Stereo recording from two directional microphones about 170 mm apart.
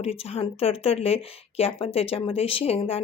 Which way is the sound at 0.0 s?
35° left (ahead or behind).